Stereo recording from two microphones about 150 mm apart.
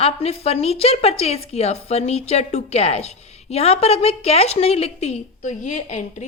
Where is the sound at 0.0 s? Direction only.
40° left (ahead or behind).